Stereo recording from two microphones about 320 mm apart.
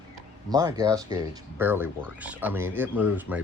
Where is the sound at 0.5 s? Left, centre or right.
Centre.